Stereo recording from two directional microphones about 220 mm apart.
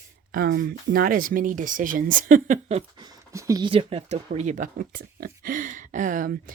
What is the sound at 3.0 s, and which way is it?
Speech, 15° right (ahead or behind).